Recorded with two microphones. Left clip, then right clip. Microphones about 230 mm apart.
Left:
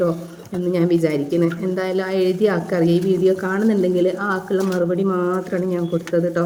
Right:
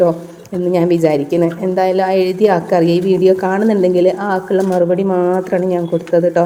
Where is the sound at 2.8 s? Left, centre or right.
Left.